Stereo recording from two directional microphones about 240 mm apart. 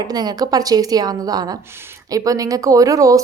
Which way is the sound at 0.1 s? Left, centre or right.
Centre.